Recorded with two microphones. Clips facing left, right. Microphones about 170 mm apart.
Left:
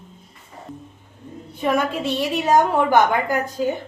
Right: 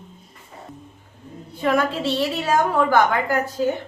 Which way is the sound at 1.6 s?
15° left (ahead or behind).